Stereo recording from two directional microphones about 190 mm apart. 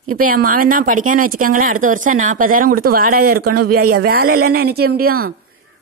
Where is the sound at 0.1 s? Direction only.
50° right (ahead or behind).